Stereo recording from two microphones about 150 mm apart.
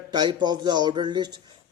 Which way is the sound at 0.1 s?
30° right (ahead or behind).